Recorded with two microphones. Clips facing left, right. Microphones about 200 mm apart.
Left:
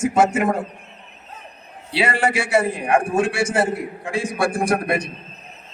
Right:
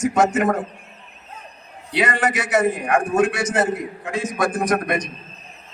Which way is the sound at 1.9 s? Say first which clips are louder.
Left 1 dB; 30° left (ahead or behind).